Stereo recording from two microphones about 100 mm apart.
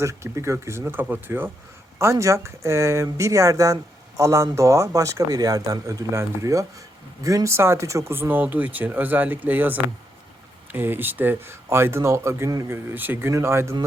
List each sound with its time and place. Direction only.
0.0 s speech: 30° right (ahead or behind)